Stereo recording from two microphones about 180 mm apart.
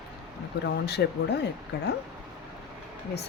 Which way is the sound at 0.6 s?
65° left (ahead or behind).